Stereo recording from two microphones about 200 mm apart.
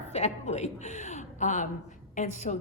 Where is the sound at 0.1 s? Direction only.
35° left (ahead or behind).